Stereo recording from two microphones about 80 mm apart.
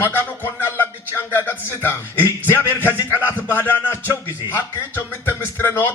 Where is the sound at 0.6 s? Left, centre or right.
Left.